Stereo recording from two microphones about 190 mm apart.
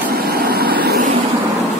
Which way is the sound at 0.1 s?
55° right (ahead or behind).